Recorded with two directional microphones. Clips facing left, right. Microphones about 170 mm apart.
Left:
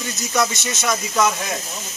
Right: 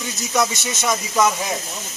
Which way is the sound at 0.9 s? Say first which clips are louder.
Right 1 dB; centre (ahead or behind).